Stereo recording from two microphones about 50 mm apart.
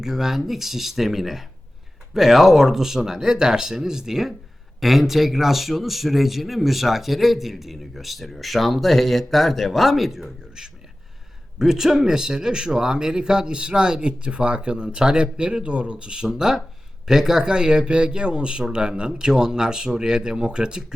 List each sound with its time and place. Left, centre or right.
0.0 s a man's voice: centre